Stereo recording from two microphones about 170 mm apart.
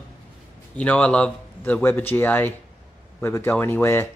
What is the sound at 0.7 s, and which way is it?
Speech, 5° left (ahead or behind).